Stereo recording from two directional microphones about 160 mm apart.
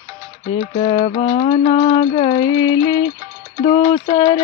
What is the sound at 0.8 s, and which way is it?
Music, 30° left (ahead or behind).